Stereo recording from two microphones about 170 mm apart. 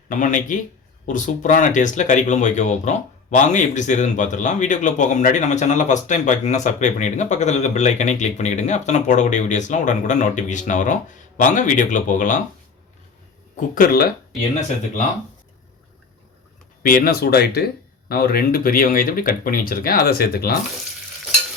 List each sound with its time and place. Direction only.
0.1 s speech: 50° left (ahead or behind)
13.6 s speech: 55° left (ahead or behind)
16.8 s speech: 55° left (ahead or behind)